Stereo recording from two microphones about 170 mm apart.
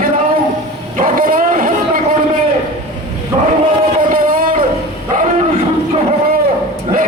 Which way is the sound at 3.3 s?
35° right (ahead or behind).